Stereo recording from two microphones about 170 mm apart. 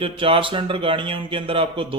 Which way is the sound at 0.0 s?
30° right (ahead or behind).